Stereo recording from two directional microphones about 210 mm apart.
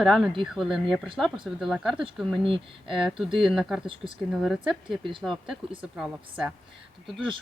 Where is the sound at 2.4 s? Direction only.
25° right (ahead or behind).